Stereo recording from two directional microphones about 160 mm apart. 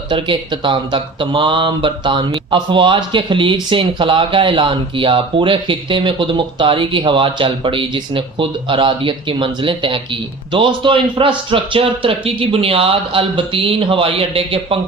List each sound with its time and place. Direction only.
0.1 s speech: 30° right (ahead or behind)